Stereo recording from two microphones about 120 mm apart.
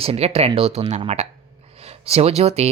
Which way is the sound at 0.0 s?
55° right (ahead or behind).